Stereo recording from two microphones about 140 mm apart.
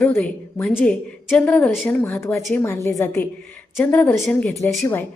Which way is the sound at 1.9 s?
15° left (ahead or behind).